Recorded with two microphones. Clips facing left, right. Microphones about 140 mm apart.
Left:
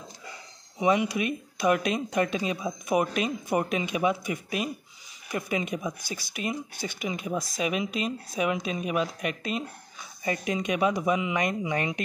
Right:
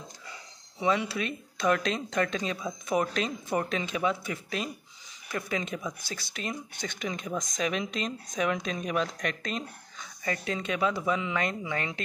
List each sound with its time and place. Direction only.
0.7 s speech: 15° left (ahead or behind)